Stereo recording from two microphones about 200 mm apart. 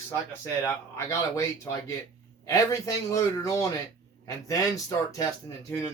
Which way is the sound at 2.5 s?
15° left (ahead or behind).